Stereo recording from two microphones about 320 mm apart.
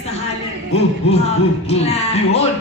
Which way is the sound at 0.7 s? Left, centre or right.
Centre.